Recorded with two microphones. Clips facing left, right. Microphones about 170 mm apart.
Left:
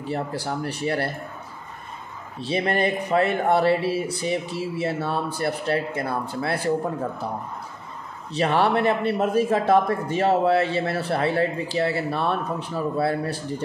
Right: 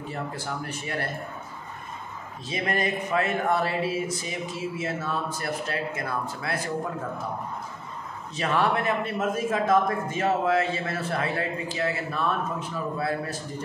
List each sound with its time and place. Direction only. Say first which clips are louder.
0.1 s speech: left 7 dB; 35° left (ahead or behind)
2.4 s speech: left 5 dB; 30° left (ahead or behind)
8.3 s speech: left 4 dB; 35° left (ahead or behind)